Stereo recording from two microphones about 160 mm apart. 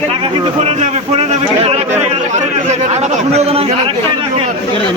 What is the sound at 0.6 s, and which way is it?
Chatter, 40° right (ahead or behind).